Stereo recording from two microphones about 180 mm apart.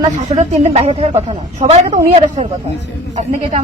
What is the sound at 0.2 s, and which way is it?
A woman's voice, 40° right (ahead or behind).